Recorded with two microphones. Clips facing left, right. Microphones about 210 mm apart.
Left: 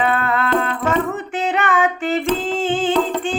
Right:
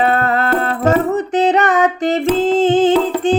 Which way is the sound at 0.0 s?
40° right (ahead or behind).